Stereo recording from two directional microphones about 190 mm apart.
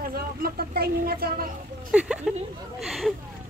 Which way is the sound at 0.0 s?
50° right (ahead or behind).